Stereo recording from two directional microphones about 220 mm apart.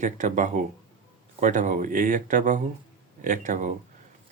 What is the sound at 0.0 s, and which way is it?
Speech, 35° right (ahead or behind).